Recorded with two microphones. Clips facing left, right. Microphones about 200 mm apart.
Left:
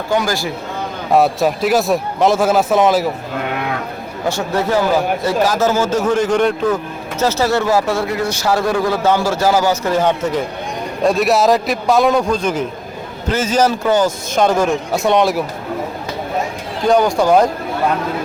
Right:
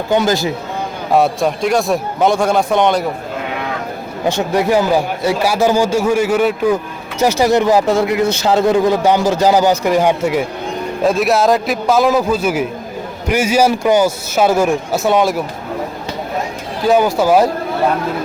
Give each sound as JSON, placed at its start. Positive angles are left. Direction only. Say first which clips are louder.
{"t": 0.1, "sound": "speech", "louder": "right 4 dB", "side_deg": -20}
{"t": 1.1, "sound": "a man's voice", "louder": "even", "side_deg": 0}
{"t": 4.3, "sound": "speech", "louder": "right 3 dB", "side_deg": -15}
{"t": 11.0, "sound": "a man's voice", "louder": "even", "side_deg": 0}
{"t": 16.8, "sound": "a man's voice", "louder": "right 1 dB", "side_deg": -5}